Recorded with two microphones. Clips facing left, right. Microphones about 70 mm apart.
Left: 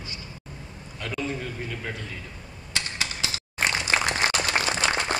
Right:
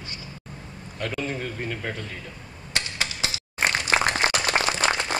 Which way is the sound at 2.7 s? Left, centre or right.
Right.